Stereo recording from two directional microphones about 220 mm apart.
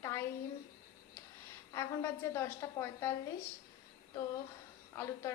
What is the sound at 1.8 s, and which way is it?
A woman's voice, 15° left (ahead or behind).